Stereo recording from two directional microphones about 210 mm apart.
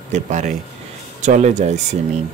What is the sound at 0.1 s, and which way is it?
Speech, 35° right (ahead or behind).